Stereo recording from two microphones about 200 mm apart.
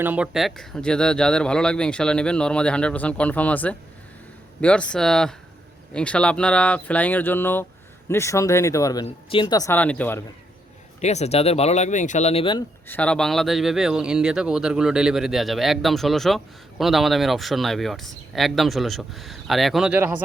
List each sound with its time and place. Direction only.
0.0 s speech: 5° right (ahead or behind); by 10.2 s 10° left (ahead or behind)
11.0 s speech: 35° left (ahead or behind)
12.9 s speech: 5° left (ahead or behind)